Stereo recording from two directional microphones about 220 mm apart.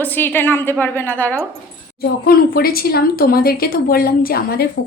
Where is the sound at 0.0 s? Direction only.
10° left (ahead or behind).